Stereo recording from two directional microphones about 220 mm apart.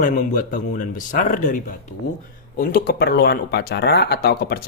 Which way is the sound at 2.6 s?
40° left (ahead or behind).